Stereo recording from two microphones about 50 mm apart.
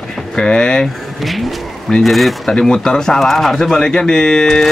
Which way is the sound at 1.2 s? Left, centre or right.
Centre.